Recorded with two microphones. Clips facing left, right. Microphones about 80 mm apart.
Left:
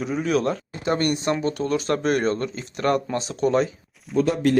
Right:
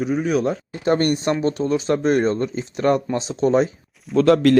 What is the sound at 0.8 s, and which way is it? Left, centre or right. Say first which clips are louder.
Speech: right 4 dB; right.